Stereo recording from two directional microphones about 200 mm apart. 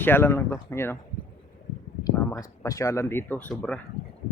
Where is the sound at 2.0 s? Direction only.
15° left (ahead or behind).